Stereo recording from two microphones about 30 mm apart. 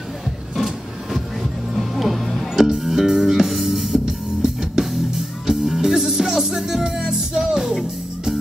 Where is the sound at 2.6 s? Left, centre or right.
Centre.